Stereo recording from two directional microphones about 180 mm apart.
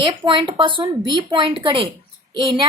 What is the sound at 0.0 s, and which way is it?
Speech, 25° right (ahead or behind).